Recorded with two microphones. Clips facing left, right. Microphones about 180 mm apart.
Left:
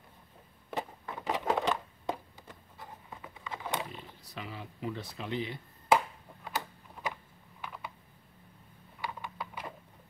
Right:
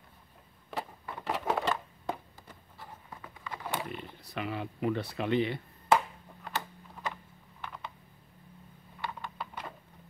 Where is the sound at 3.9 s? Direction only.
65° right (ahead or behind).